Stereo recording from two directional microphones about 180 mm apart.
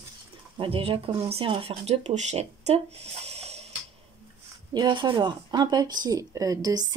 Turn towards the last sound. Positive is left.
turn(degrees=-20)  # may be behind; listen again after turning